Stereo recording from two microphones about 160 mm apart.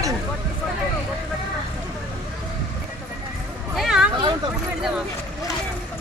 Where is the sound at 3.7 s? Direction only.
Centre (ahead or behind).